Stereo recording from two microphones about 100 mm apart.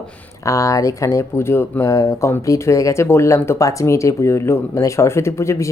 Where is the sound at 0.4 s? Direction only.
35° left (ahead or behind).